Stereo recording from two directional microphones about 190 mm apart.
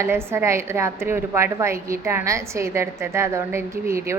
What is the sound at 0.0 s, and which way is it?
A woman's voice, 15° right (ahead or behind).